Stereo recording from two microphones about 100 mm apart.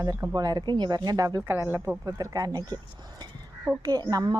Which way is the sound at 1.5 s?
25° right (ahead or behind).